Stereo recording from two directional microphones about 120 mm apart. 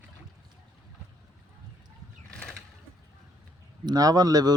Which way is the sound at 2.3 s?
5° left (ahead or behind).